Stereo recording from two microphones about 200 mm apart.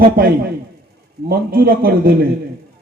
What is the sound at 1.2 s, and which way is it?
Speech, 50° right (ahead or behind).